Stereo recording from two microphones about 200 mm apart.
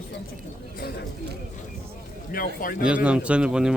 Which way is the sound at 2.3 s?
45° left (ahead or behind).